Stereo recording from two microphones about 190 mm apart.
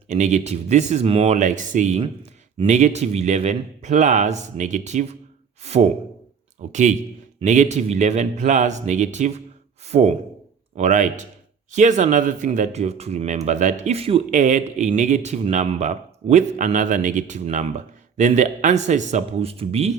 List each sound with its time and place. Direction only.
0.1 s speech: 40° right (ahead or behind)